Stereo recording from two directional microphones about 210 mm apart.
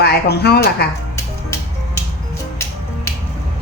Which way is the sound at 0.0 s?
50° left (ahead or behind).